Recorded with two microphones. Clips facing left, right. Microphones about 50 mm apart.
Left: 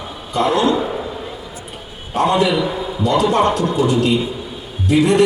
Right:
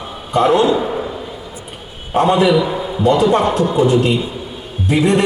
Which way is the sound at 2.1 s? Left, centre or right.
Right.